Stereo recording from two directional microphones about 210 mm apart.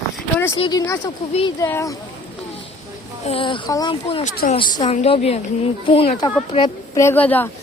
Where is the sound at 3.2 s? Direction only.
25° left (ahead or behind).